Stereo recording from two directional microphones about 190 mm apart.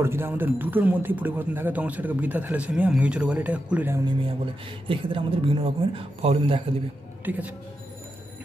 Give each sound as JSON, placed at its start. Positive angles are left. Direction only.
{"t": 0.0, "sound": "speech", "side_deg": -10}
{"t": 4.8, "sound": "speech", "side_deg": -25}
{"t": 7.2, "sound": "speech", "side_deg": -10}